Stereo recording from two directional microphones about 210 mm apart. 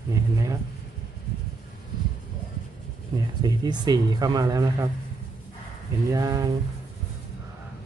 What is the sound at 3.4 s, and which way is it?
Speech, 20° right (ahead or behind).